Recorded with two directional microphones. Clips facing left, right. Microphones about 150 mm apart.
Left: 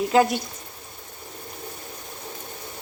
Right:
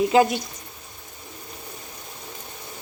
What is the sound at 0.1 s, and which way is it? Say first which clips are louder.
Speech: left 2 dB; centre (ahead or behind).